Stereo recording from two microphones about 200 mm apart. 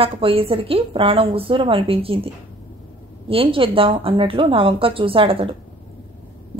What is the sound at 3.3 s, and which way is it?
A woman's voice, 25° right (ahead or behind).